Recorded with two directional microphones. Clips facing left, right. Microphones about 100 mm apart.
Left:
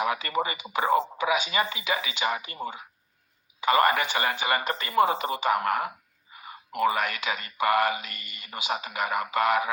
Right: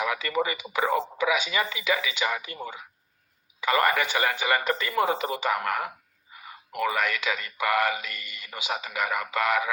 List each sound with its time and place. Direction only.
0.0 s speech: 40° left (ahead or behind)
3.6 s speech: 40° left (ahead or behind)